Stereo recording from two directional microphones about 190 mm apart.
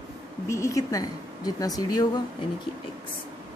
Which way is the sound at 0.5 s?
15° left (ahead or behind).